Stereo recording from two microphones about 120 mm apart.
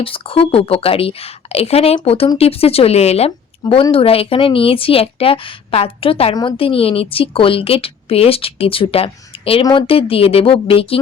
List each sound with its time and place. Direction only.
0.0 s a woman's voice: 50° left (ahead or behind)